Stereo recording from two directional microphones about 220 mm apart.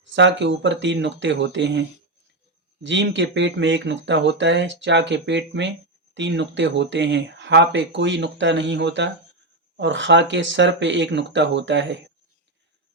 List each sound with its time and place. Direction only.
0.1 s speech: 55° right (ahead or behind)